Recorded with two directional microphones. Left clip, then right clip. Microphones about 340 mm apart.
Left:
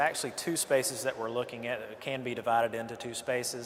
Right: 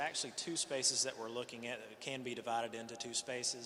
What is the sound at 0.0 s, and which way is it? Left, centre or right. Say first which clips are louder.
A man's voice: left 10 dB; left.